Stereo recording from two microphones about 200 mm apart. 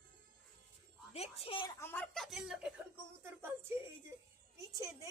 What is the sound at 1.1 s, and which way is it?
Speech, 30° left (ahead or behind).